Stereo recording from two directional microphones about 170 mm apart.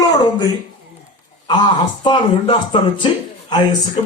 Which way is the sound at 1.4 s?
25° left (ahead or behind).